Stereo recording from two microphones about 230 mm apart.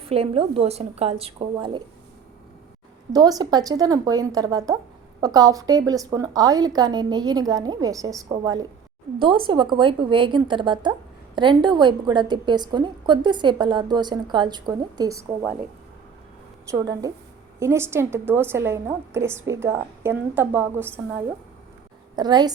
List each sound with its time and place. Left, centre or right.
0.0 s a woman's voice: right
3.1 s a woman's voice: centre
16.7 s a woman's voice: centre